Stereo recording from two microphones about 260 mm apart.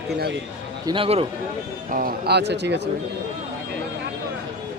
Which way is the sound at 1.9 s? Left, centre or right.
Right.